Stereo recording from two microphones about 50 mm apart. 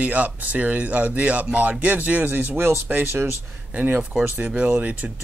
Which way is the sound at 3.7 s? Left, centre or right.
Right.